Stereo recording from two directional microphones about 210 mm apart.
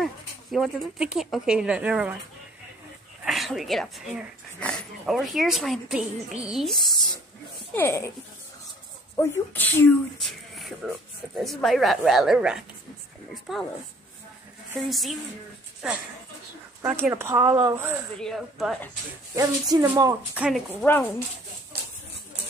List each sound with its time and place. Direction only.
0.0 s speech: centre (ahead or behind)
3.3 s speech: centre (ahead or behind)
7.7 s speech: 10° left (ahead or behind)
9.1 s speech: 15° left (ahead or behind)
14.8 s speech: centre (ahead or behind)
18.2 s speech: centre (ahead or behind)
19.3 s speech: 15° right (ahead or behind)
20.8 s speech: 10° left (ahead or behind)